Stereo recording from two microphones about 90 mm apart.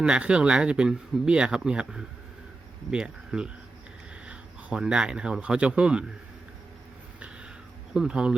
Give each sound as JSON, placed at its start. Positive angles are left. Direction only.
{"t": 0.0, "sound": "speech", "side_deg": -10}
{"t": 7.9, "sound": "speech", "side_deg": -10}